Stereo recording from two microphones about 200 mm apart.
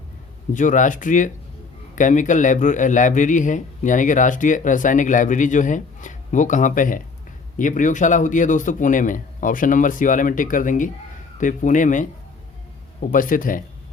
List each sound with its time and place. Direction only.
0.5 s a man's voice: 40° left (ahead or behind)